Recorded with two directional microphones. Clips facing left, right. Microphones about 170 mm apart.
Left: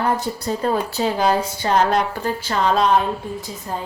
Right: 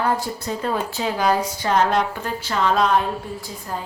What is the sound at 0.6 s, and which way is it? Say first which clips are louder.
Speech: left 4 dB; 35° left (ahead or behind).